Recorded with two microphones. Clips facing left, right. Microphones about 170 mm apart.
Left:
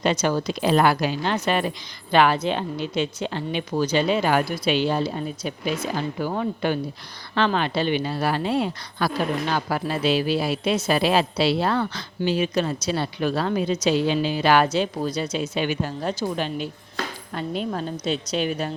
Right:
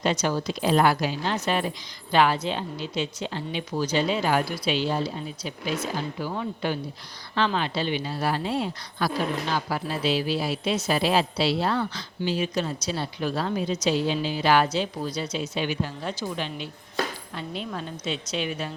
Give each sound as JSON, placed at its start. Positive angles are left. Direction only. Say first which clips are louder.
{"t": 0.0, "sound": "a woman's voice", "louder": "left 3 dB", "side_deg": 65}